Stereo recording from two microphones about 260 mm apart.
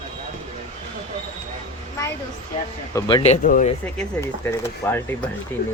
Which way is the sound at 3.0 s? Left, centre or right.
Centre.